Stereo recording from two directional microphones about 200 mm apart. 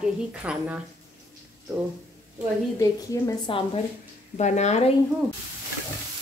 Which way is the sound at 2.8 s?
15° left (ahead or behind).